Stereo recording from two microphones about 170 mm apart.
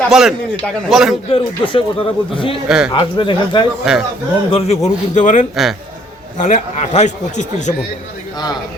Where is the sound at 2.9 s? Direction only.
30° left (ahead or behind).